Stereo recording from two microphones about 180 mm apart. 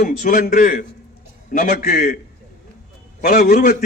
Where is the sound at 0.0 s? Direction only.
50° left (ahead or behind).